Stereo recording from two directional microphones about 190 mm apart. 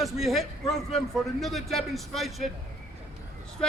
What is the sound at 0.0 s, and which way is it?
A man's voice, centre (ahead or behind).